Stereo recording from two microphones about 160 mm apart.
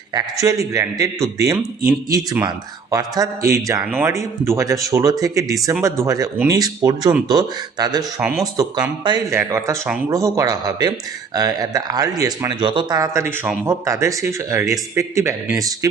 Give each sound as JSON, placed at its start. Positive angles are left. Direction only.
{"t": 0.4, "sound": "a man's voice", "side_deg": -20}